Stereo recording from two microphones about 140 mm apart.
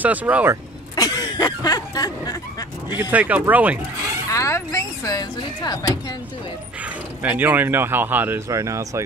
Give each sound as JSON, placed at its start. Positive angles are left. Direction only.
{"t": 0.0, "sound": "speech", "side_deg": -10}
{"t": 0.9, "sound": "a sound", "side_deg": 30}
{"t": 3.0, "sound": "speech", "side_deg": -10}
{"t": 4.3, "sound": "speech", "side_deg": 20}
{"t": 7.2, "sound": "speech", "side_deg": -15}